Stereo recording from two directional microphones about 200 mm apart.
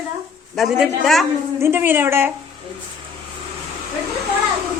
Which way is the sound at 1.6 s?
10° right (ahead or behind).